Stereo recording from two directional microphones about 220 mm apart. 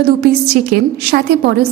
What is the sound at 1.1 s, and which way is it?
Speech, 45° right (ahead or behind).